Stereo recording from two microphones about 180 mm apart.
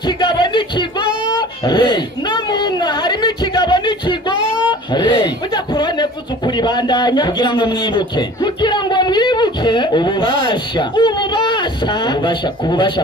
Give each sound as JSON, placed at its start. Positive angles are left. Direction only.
{"t": 0.2, "sound": "music", "side_deg": 25}
{"t": 1.7, "sound": "a sound", "side_deg": 25}
{"t": 5.8, "sound": "speech", "side_deg": 25}